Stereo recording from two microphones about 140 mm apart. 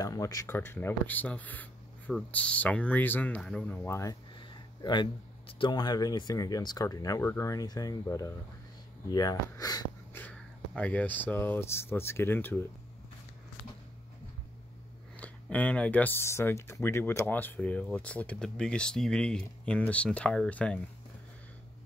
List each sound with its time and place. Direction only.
0.0 s speech: 25° left (ahead or behind)
4.4 s a sound: 30° left (ahead or behind)
5.5 s speech: 35° left (ahead or behind)
10.1 s speech: 10° left (ahead or behind)
15.1 s speech: 10° left (ahead or behind)